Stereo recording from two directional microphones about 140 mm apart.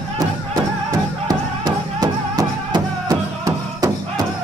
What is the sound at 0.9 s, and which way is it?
Music, 30° right (ahead or behind).